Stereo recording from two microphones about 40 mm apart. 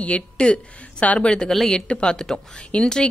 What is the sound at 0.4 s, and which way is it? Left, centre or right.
Speech, left.